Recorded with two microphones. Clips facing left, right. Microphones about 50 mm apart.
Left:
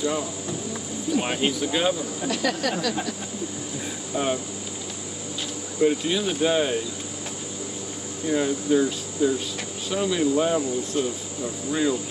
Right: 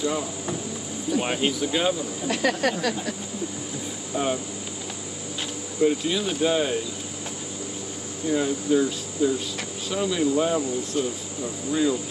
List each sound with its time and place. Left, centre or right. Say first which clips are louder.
0.0 s insect: even; centre
1.2 s speech: even; centre
2.2 s speech: right 2 dB; right
4.1 s insect: even; centre
5.8 s insect: left 1 dB; centre
8.3 s insect: even; centre